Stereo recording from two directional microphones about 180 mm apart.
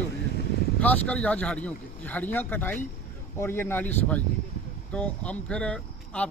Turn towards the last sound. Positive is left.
turn(degrees=5)  # may be behind; listen again after turning